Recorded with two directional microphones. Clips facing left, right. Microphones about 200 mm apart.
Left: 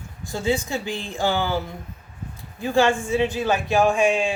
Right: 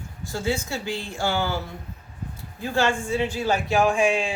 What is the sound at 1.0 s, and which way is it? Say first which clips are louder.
Speech: left 3 dB; 15° left (ahead or behind).